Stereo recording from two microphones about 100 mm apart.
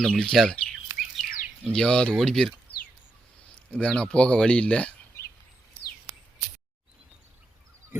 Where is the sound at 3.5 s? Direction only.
10° left (ahead or behind).